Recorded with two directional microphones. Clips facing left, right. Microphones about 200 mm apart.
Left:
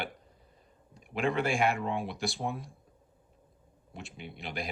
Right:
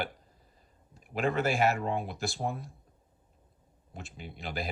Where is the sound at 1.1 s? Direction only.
40° right (ahead or behind).